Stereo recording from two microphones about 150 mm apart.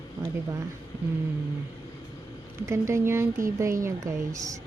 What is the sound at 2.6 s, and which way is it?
Speech, 20° right (ahead or behind).